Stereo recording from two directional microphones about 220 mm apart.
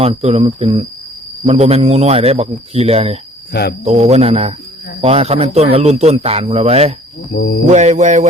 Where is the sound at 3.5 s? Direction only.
45° left (ahead or behind).